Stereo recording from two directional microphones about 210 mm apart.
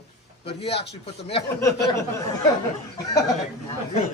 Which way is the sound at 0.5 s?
30° left (ahead or behind).